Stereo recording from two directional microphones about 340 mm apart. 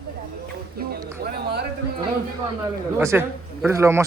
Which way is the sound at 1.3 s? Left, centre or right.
Right.